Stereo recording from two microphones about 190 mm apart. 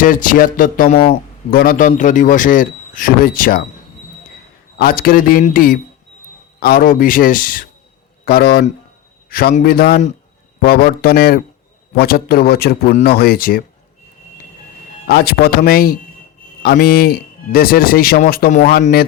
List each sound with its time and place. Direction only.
0.0 s a man's voice: 45° left (ahead or behind)
4.8 s a man's voice: 50° left (ahead or behind)
15.0 s a man's voice: 55° left (ahead or behind)